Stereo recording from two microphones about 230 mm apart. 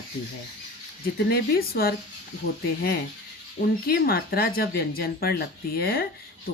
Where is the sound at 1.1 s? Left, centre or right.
Left.